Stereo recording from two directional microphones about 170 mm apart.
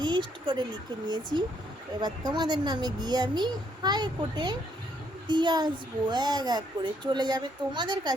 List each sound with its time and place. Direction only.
0.0 s a child's voice: 25° right (ahead or behind)